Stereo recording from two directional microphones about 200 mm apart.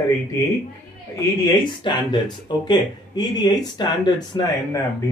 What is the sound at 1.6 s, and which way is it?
Speech, 20° left (ahead or behind).